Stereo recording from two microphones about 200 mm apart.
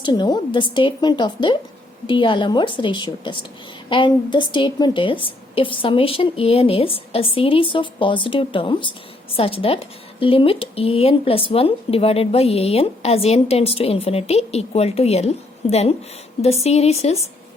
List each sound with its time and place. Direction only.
0.0 s speech: 20° left (ahead or behind)